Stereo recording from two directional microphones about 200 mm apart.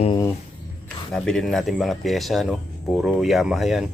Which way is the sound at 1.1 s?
Centre (ahead or behind).